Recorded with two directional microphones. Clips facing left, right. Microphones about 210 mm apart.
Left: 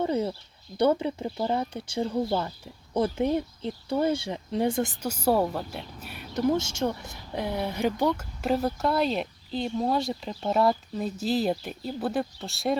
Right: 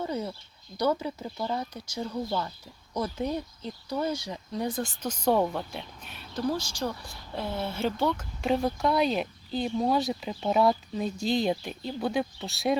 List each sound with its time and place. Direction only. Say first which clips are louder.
0.0 s speech: left 5 dB; 25° left (ahead or behind)
5.0 s speech: right 1 dB; 5° left (ahead or behind)
6.3 s speech: left 5 dB; 20° left (ahead or behind); by 12.8 s centre (ahead or behind)